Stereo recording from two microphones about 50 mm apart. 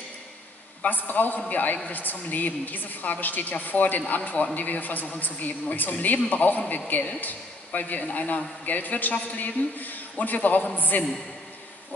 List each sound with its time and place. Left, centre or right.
0.8 s a woman's voice: left